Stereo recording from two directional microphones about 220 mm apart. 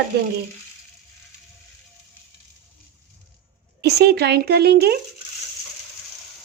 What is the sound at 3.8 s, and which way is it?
Speech, 50° right (ahead or behind).